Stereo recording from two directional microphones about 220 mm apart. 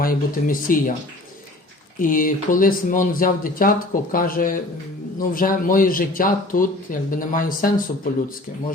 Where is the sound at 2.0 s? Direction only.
40° left (ahead or behind).